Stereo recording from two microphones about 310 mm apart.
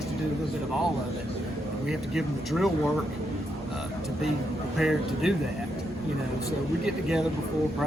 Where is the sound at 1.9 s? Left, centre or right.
Centre.